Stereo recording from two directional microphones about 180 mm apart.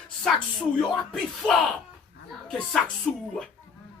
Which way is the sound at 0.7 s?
5° left (ahead or behind).